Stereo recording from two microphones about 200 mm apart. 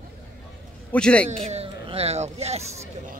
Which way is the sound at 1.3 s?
30° right (ahead or behind).